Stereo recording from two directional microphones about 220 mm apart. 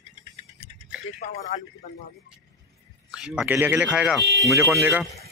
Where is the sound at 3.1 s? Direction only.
5° right (ahead or behind).